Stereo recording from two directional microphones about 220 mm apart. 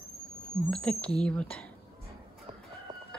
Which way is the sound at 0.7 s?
5° left (ahead or behind).